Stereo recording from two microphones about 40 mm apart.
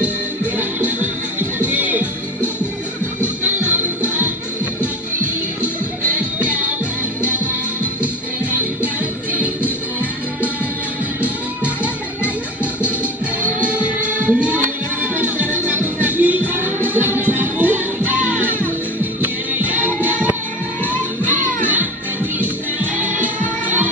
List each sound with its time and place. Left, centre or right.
0.6 s music: right
6.1 s music: right
8.0 s music: right
11.2 s music: right
13.4 s music: right
15.1 s music: right
22.9 s music: right